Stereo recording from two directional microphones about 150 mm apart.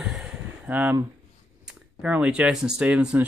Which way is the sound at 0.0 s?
5° right (ahead or behind).